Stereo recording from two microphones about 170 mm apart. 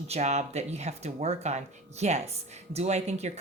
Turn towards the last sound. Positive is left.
turn(degrees=-40)  # may be behind; listen again after turning